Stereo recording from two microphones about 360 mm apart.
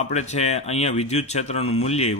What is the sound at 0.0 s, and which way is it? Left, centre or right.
A man's voice, centre.